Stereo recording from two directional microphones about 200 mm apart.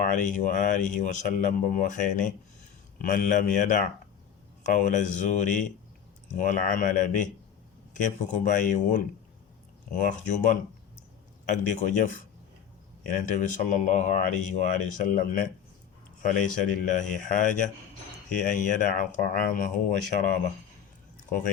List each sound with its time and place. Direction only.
0.0 s speech: 40° left (ahead or behind)
13.1 s speech: 40° left (ahead or behind)
18.4 s speech: 40° left (ahead or behind)
21.2 s speech: 40° left (ahead or behind)